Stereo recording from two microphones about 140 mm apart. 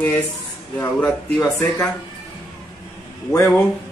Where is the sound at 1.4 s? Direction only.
25° left (ahead or behind).